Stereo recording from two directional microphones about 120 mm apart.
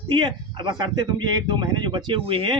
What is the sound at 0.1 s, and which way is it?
A man's voice, 40° right (ahead or behind).